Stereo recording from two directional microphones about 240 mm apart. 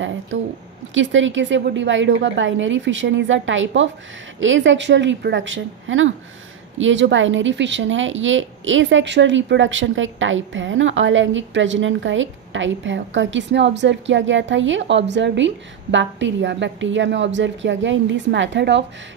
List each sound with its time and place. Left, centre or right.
0.3 s speech: right